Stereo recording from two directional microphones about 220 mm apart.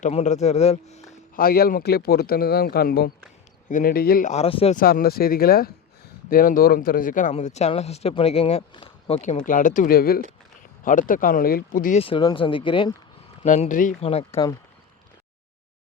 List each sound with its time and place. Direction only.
0.0 s speech: 30° left (ahead or behind)
1.4 s speech: 45° left (ahead or behind); by 4.8 s 25° left (ahead or behind)
4.8 s speech: 40° left (ahead or behind)
11.9 s speech: 25° left (ahead or behind)
13.4 s speech: 35° left (ahead or behind)